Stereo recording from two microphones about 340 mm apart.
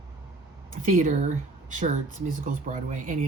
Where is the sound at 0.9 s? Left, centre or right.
Right.